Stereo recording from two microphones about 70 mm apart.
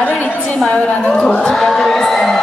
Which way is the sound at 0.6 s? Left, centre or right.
Centre.